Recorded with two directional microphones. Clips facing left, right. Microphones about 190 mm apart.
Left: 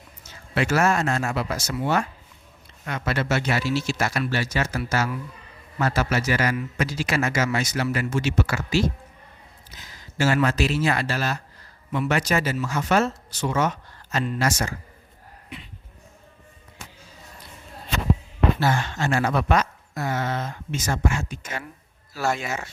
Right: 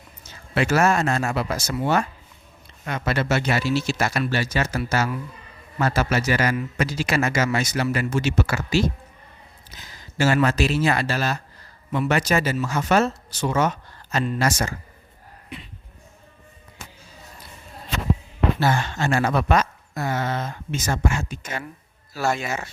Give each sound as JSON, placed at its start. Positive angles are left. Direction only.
{"t": 0.5, "sound": "a man's voice", "side_deg": -35}
{"t": 10.2, "sound": "speech", "side_deg": -35}
{"t": 18.6, "sound": "speech", "side_deg": -35}